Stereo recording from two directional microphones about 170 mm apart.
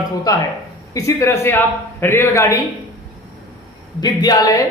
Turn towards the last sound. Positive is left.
turn(degrees=20)  # may be behind; listen again after turning